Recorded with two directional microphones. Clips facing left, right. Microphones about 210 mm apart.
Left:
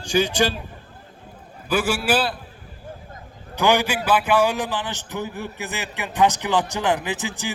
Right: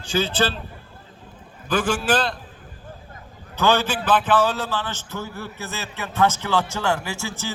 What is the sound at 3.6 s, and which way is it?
A man's voice, 15° left (ahead or behind).